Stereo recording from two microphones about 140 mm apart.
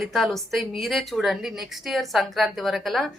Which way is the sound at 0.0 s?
Centre (ahead or behind).